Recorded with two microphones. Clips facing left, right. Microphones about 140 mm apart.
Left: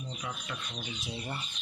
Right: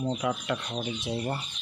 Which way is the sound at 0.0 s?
75° right (ahead or behind).